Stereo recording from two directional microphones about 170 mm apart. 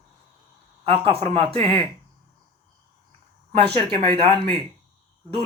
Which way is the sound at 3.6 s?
30° right (ahead or behind).